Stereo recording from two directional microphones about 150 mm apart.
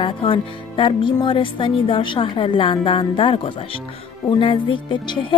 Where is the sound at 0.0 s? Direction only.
35° left (ahead or behind).